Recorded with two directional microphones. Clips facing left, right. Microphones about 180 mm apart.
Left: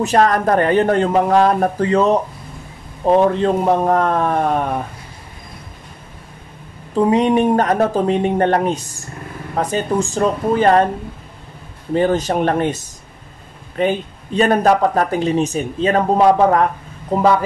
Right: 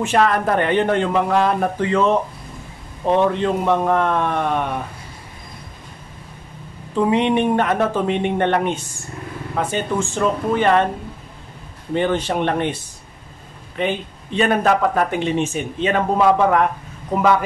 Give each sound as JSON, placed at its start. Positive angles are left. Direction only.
{"t": 0.0, "sound": "speech", "side_deg": 40}
{"t": 7.1, "sound": "speech", "side_deg": 40}
{"t": 11.9, "sound": "speech", "side_deg": 40}